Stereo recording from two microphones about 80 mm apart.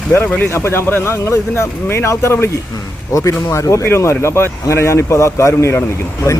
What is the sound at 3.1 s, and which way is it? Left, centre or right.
Speech, left.